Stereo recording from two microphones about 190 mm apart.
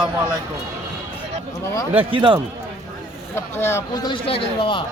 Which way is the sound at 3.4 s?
15° left (ahead or behind).